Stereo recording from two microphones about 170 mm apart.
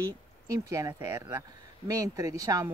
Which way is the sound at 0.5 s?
20° right (ahead or behind).